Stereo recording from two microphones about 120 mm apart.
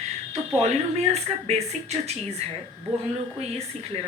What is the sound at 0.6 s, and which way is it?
Speech, 65° right (ahead or behind).